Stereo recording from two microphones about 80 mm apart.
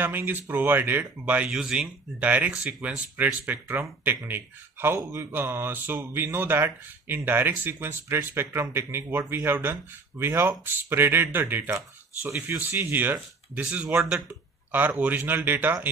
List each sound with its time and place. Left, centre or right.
0.0 s speech: right